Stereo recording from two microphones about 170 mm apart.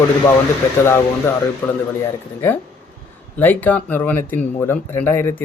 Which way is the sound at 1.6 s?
10° left (ahead or behind).